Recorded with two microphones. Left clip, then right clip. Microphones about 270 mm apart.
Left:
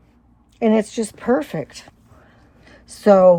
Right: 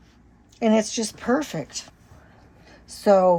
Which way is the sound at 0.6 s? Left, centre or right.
Left.